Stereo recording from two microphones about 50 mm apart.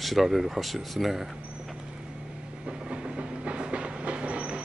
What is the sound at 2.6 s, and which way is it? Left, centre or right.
Train, centre.